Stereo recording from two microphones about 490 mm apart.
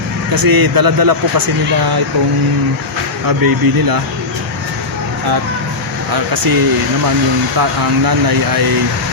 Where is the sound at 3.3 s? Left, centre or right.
Right.